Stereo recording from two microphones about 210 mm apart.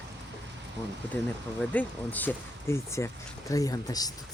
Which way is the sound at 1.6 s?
5° left (ahead or behind).